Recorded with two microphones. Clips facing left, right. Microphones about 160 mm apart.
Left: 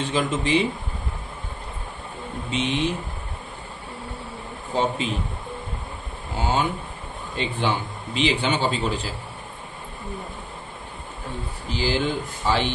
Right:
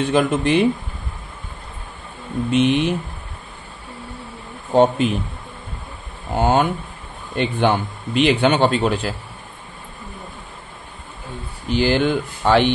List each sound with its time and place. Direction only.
0.0 s a man's voice: 60° right (ahead or behind)
2.5 s a man's voice: 60° right (ahead or behind)
4.7 s a man's voice: 60° right (ahead or behind)
6.3 s a man's voice: 55° right (ahead or behind)
11.7 s a man's voice: 65° right (ahead or behind)